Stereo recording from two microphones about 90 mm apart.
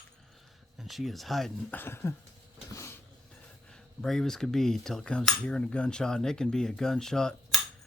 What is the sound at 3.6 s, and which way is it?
Cutlery, 5° left (ahead or behind).